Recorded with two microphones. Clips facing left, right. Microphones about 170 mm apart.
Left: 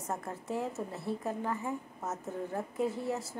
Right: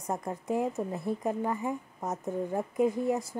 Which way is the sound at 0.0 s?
15° right (ahead or behind).